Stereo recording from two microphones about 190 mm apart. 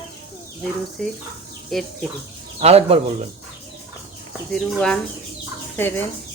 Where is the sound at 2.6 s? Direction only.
35° right (ahead or behind).